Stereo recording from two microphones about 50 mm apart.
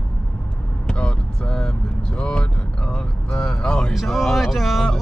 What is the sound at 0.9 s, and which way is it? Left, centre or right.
Vehicle, left.